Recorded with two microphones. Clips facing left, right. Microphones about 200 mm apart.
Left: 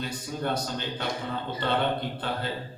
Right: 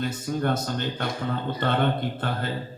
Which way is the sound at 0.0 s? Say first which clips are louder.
Right 5 dB; 50° right (ahead or behind).